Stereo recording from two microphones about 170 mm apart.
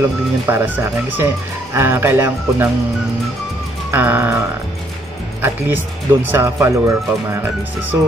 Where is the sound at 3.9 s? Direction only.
10° right (ahead or behind).